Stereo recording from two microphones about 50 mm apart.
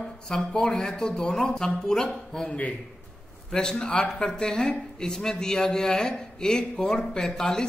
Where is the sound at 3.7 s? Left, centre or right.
Centre.